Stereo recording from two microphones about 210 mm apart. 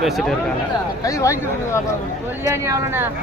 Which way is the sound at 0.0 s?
Centre (ahead or behind).